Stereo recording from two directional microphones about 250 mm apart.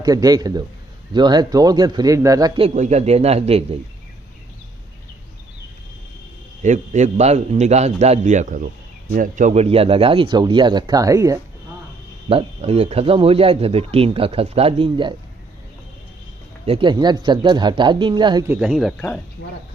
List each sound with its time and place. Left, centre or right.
0.0 s speech: centre
2.6 s speech: right
6.6 s speech: right; by 11.3 s centre
12.3 s speech: right
16.6 s speech: right; by 19.2 s centre